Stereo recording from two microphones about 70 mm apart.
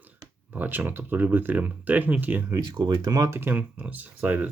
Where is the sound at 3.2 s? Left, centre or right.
Right.